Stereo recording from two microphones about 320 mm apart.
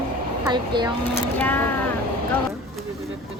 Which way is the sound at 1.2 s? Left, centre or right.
Centre.